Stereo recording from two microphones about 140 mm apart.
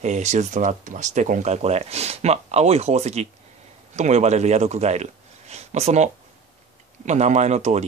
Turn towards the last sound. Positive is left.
turn(degrees=-55)  # may be behind; listen again after turning